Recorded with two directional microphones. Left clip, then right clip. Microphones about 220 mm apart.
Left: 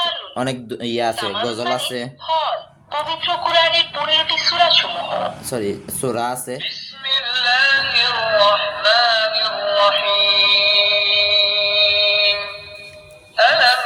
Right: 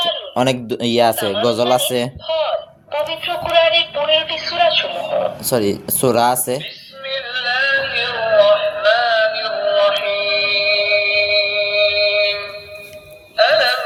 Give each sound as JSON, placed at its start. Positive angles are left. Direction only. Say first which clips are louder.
{"t": 0.3, "sound": "speech", "louder": "right 6 dB", "side_deg": -30}
{"t": 2.9, "sound": "a sound", "louder": "even", "side_deg": 15}
{"t": 5.5, "sound": "speech", "louder": "right 6 dB", "side_deg": -35}
{"t": 6.6, "sound": "music", "louder": "left 3 dB", "side_deg": 15}